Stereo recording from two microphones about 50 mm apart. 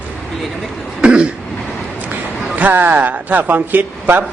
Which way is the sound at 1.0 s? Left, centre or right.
Centre.